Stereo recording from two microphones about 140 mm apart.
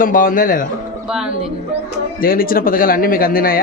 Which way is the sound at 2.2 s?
90° left.